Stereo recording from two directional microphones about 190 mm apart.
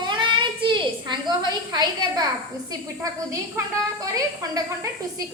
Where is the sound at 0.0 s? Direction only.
25° right (ahead or behind).